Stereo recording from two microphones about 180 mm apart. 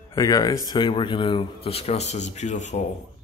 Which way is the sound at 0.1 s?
20° left (ahead or behind).